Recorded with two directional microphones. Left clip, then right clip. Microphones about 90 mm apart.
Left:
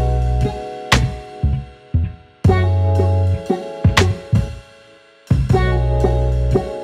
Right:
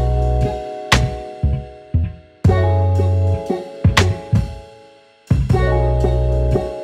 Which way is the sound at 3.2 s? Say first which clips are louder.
Even; 10° right (ahead or behind).